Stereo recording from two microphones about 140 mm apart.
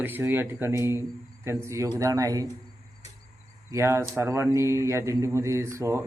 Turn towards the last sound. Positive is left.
turn(degrees=-20)  # may be behind; listen again after turning